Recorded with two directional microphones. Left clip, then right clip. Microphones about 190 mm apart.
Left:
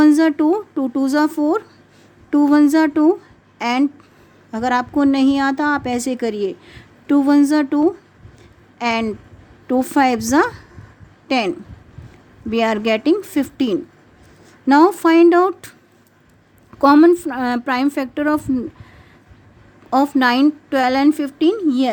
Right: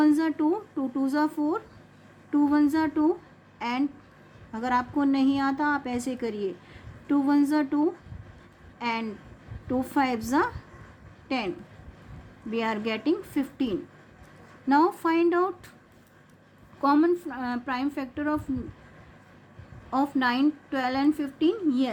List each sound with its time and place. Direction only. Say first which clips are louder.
0.0 s a woman's voice: left 10 dB; 50° left (ahead or behind)
16.8 s a woman's voice: left 12 dB; 55° left (ahead or behind)
19.9 s a woman's voice: left 10 dB; 55° left (ahead or behind)